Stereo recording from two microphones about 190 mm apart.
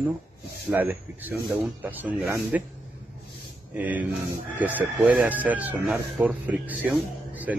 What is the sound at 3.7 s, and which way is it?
Speech, 10° right (ahead or behind).